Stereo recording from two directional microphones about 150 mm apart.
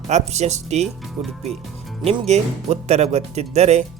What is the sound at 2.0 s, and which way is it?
Speech, 45° right (ahead or behind).